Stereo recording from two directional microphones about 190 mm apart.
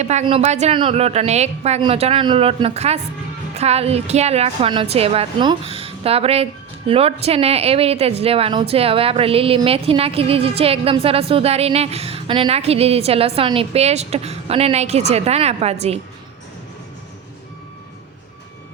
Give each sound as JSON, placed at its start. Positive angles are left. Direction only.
{"t": 0.0, "sound": "a woman's voice", "side_deg": -35}